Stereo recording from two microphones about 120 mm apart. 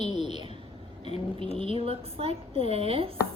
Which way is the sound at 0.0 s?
35° right (ahead or behind).